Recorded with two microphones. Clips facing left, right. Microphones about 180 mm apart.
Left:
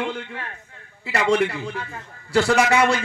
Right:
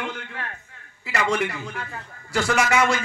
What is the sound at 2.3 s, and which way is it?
Speech, 35° left (ahead or behind).